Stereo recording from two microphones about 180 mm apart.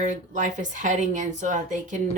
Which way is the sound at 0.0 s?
45° right (ahead or behind).